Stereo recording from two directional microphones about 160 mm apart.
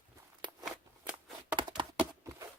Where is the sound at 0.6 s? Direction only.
5° right (ahead or behind).